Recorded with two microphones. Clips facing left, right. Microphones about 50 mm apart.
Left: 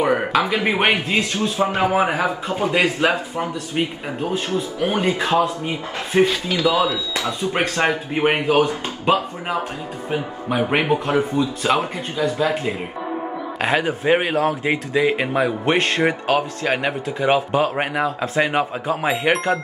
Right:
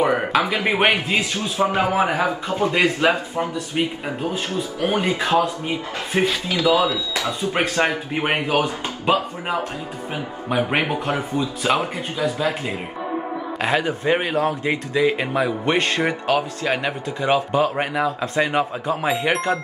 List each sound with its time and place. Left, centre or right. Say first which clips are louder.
0.0 s a sound: even; centre
0.7 s speech: even; centre
1.8 s speech: left 2 dB; centre
13.6 s speech: left 1 dB; centre
14.3 s speech: left 1 dB; centre
14.6 s speech: left 1 dB; centre